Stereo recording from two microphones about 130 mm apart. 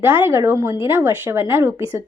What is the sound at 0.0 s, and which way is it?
A woman's voice, 15° right (ahead or behind).